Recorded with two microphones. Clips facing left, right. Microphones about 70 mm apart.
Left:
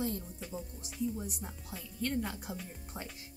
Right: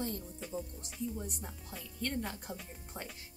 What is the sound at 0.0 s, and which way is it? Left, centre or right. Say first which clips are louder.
Speech: left 2 dB; centre.